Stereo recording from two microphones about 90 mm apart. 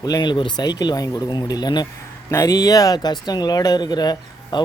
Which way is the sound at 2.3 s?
35° left (ahead or behind).